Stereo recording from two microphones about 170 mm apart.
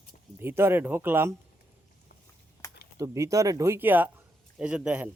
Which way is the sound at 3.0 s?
20° right (ahead or behind).